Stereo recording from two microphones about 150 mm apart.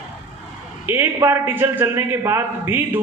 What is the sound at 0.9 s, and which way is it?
A man's voice, 15° right (ahead or behind).